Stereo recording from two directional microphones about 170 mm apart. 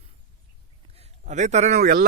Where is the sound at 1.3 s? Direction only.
45° right (ahead or behind).